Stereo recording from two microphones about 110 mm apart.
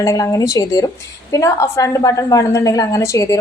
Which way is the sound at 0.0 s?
35° left (ahead or behind).